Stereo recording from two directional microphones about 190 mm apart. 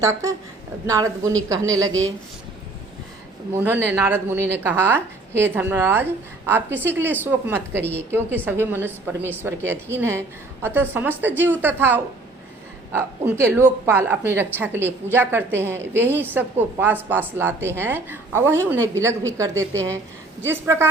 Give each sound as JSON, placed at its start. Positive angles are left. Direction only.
{"t": 0.0, "sound": "a woman's voice", "side_deg": -15}
{"t": 3.5, "sound": "a woman's voice", "side_deg": -10}